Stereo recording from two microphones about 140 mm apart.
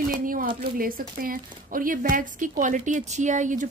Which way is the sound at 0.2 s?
85° right.